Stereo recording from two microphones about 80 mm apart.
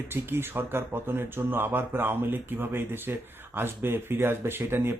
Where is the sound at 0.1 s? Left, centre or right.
Right.